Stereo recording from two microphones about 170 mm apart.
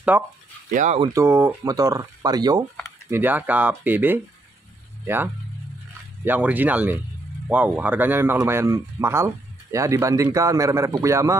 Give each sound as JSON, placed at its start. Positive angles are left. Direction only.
{"t": 0.1, "sound": "speech", "side_deg": -10}
{"t": 0.7, "sound": "speech", "side_deg": -50}
{"t": 1.1, "sound": "speech", "side_deg": -15}
{"t": 3.1, "sound": "speech", "side_deg": -10}